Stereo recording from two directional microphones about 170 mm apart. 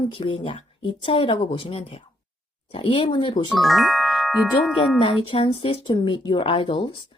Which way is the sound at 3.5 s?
Centre (ahead or behind).